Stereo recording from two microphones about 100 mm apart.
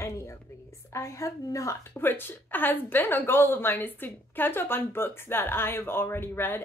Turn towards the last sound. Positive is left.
turn(degrees=20)  # may be behind; listen again after turning